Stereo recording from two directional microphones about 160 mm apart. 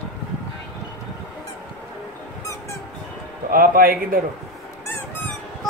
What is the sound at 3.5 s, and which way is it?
Speech, 60° right (ahead or behind).